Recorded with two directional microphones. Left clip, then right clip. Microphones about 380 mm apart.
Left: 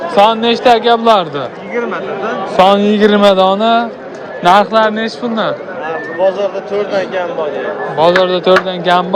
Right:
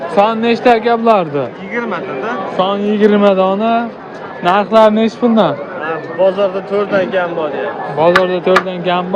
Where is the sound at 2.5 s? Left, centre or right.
Centre.